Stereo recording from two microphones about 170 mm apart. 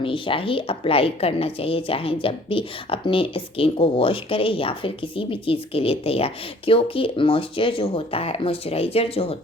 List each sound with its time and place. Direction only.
0.0 s a woman's voice: 30° left (ahead or behind)